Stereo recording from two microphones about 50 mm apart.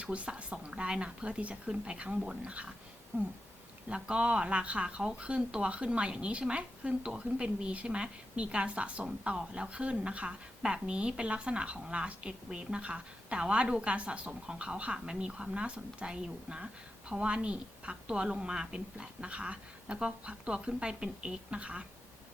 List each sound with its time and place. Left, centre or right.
0.0 s a woman's voice: right
3.8 s a woman's voice: centre